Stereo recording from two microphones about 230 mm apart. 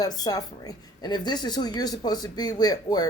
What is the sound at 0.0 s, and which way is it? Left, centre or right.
Speech, centre.